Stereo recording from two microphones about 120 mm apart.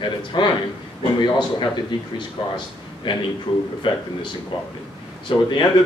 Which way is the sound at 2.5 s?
40° left (ahead or behind).